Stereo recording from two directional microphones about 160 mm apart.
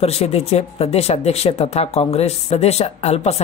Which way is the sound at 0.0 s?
40° left (ahead or behind).